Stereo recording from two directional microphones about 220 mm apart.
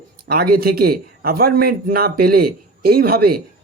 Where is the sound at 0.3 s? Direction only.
45° right (ahead or behind).